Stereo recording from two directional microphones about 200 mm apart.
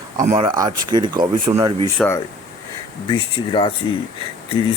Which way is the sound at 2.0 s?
10° left (ahead or behind).